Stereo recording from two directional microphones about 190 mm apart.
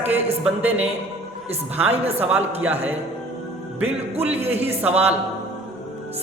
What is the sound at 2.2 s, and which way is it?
Speech, 10° right (ahead or behind).